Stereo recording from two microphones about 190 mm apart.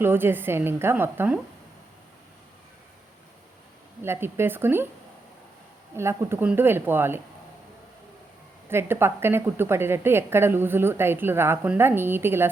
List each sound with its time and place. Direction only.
0.0 s a woman's voice: 10° right (ahead or behind)
4.0 s a woman's voice: 15° right (ahead or behind)
6.0 s a woman's voice: 15° right (ahead or behind)
8.7 s a woman's voice: 10° right (ahead or behind)